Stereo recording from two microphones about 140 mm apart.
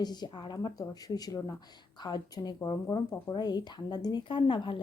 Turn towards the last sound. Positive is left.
turn(degrees=35)  # may be behind; listen again after turning